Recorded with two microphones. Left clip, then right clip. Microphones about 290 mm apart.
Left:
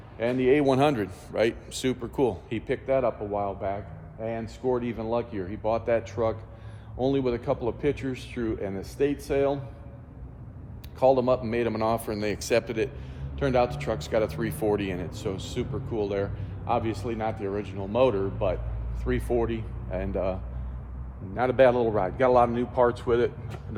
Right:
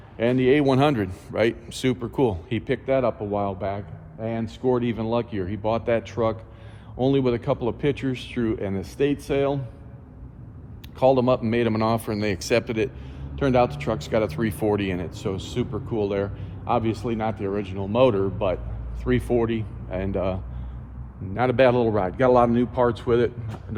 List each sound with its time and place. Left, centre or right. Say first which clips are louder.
0.2 s speech: right 3 dB; right
11.0 s speech: right 2 dB; right